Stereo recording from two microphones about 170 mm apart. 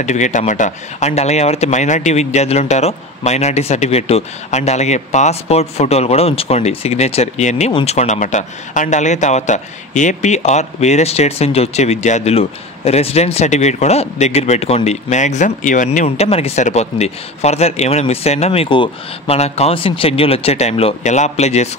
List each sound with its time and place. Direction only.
0.0 s speech: 45° left (ahead or behind)